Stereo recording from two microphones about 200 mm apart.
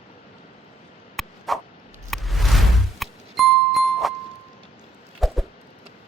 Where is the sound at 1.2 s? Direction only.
Centre (ahead or behind).